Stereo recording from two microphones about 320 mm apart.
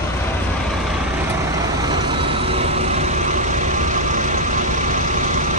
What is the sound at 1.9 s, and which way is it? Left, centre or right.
Vehicle, centre.